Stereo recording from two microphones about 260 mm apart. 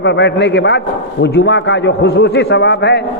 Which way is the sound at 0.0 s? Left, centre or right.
Left.